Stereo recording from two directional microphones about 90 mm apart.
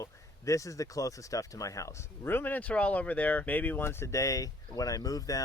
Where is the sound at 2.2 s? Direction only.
20° left (ahead or behind).